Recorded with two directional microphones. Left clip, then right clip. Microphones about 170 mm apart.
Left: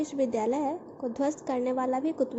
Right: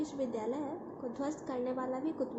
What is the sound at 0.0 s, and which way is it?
A woman's voice, 35° left (ahead or behind).